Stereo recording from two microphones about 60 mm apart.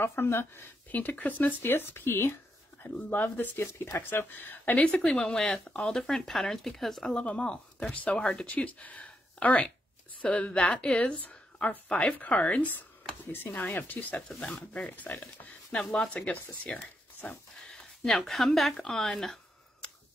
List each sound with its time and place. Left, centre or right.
0.0 s speech: left
0.9 s speech: left
1.6 s speech: left
5.1 s speech: centre
7.1 s speech: centre
15.7 s speech: centre
16.6 s a sound: left
18.0 s speech: centre
19.8 s tick: centre